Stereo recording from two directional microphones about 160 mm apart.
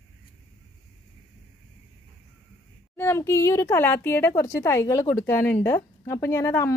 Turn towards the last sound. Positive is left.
turn(degrees=15)  # may be behind; listen again after turning